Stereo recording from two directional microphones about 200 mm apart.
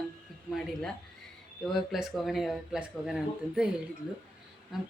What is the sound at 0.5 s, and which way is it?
Speech, centre (ahead or behind).